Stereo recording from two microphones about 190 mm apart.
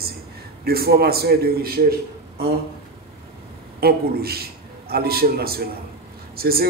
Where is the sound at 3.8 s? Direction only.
55° right (ahead or behind).